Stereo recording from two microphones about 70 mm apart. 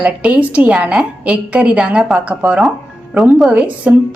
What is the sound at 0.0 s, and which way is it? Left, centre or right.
A woman's voice, centre.